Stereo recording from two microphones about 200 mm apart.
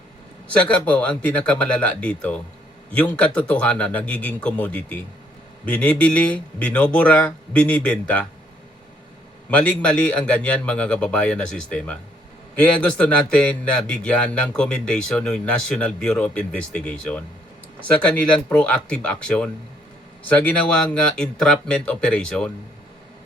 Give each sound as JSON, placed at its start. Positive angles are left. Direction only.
{"t": 0.4, "sound": "speech", "side_deg": 5}
{"t": 9.5, "sound": "speech", "side_deg": 5}
{"t": 18.4, "sound": "speech", "side_deg": 5}